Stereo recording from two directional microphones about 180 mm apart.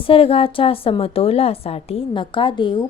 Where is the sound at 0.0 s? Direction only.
30° left (ahead or behind).